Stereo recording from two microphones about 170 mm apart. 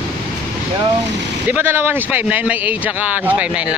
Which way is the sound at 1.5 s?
10° right (ahead or behind).